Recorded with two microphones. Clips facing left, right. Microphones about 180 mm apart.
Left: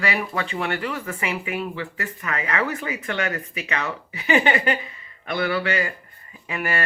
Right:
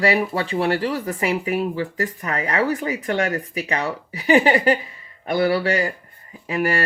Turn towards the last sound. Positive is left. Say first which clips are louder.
# right 5 dB
turn(degrees=-35)  # may be behind; listen again after turning